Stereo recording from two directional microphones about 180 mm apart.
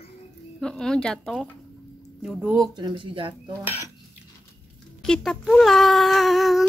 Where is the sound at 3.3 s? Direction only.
10° right (ahead or behind).